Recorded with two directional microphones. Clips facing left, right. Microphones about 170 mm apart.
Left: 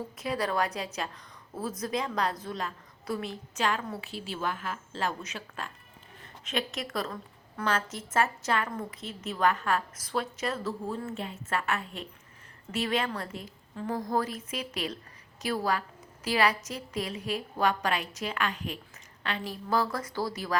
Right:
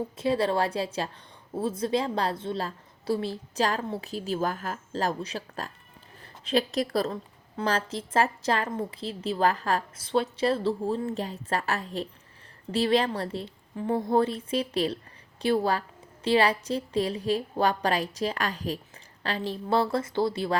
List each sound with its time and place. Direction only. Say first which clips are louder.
0.2 s a woman's voice: right 5 dB; 30° right (ahead or behind)